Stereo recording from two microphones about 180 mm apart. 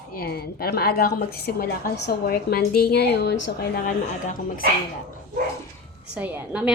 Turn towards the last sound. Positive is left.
turn(degrees=-10)  # may be behind; listen again after turning